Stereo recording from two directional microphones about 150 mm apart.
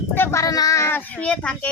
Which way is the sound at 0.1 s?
15° left (ahead or behind).